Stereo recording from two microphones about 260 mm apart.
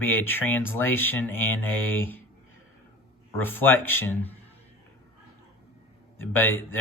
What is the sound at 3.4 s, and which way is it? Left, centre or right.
Speech, centre.